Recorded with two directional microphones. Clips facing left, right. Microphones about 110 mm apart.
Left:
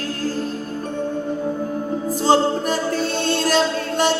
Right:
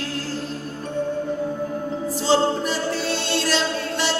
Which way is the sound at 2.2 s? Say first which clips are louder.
Left 3 dB; 45° left (ahead or behind).